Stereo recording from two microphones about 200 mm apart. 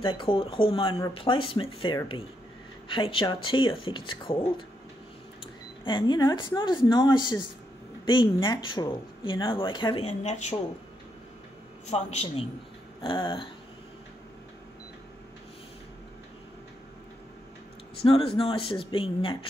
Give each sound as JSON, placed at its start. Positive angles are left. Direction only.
{"t": 0.0, "sound": "speech", "side_deg": 25}
{"t": 5.9, "sound": "speech", "side_deg": 20}
{"t": 11.9, "sound": "a man's voice", "side_deg": 30}
{"t": 18.0, "sound": "speech", "side_deg": 25}